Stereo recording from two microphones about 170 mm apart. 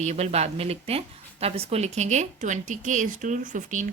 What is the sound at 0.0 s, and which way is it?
A woman's voice, 40° right (ahead or behind).